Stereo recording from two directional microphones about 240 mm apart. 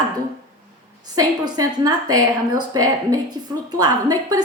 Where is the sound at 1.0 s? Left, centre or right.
Centre.